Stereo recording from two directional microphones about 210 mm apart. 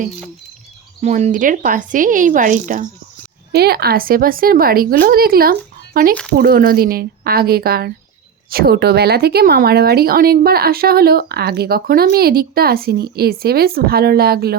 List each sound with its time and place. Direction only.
1.0 s speech: 35° right (ahead or behind)
3.5 s speech: 50° right (ahead or behind)